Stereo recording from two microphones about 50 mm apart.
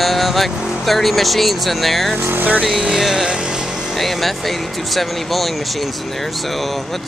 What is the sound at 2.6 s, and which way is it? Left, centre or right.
Speech, centre.